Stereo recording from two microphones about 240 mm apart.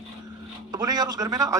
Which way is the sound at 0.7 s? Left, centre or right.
Centre.